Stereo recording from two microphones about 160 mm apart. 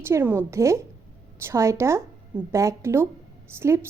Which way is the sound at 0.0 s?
15° right (ahead or behind).